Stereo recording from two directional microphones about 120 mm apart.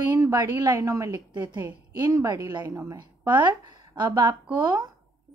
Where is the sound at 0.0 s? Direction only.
30° right (ahead or behind).